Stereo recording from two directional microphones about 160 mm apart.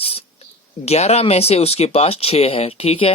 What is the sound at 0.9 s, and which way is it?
Speech, 40° left (ahead or behind).